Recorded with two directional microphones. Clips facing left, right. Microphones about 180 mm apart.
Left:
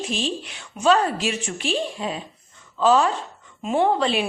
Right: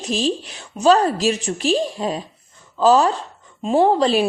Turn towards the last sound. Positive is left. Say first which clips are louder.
# right 5 dB
turn(degrees=-40)  # may be behind; listen again after turning